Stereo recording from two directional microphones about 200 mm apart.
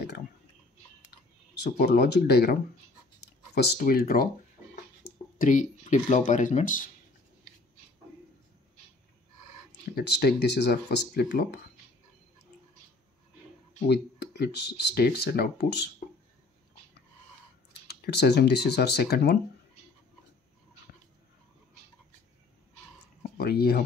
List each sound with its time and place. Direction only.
1.5 s speech: 55° left (ahead or behind)
3.5 s speech: 55° left (ahead or behind)
9.9 s speech: 55° left (ahead or behind)
13.8 s speech: 55° left (ahead or behind)
17.8 s speech: 55° left (ahead or behind)
23.3 s speech: 50° left (ahead or behind)